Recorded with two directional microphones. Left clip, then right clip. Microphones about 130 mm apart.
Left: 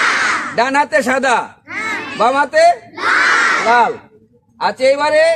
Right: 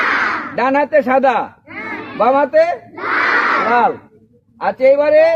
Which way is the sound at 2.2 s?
40° left (ahead or behind).